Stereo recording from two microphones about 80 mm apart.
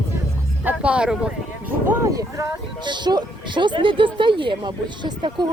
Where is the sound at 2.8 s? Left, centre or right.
Right.